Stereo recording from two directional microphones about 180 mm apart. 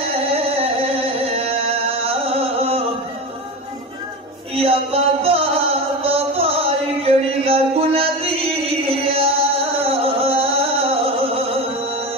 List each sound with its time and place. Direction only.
0.3 s music: 35° right (ahead or behind)
4.6 s music: 35° right (ahead or behind)